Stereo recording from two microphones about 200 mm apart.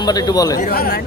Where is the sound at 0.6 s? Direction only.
50° left (ahead or behind).